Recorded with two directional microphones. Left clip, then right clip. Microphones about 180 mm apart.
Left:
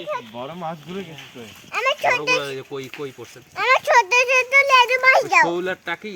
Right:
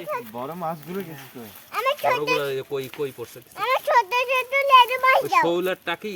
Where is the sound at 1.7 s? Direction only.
55° left (ahead or behind).